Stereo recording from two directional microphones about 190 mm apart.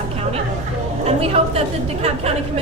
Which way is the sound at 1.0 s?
30° right (ahead or behind).